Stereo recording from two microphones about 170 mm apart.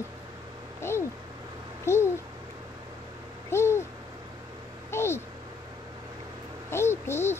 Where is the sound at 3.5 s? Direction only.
15° left (ahead or behind).